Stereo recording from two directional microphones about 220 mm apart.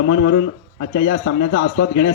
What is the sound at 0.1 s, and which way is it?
A man's voice, 55° left (ahead or behind).